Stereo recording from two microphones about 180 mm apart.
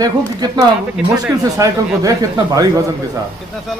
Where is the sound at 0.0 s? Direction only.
20° right (ahead or behind).